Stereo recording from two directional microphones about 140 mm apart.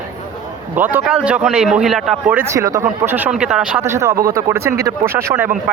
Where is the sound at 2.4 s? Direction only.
25° right (ahead or behind); by 3.8 s 5° right (ahead or behind).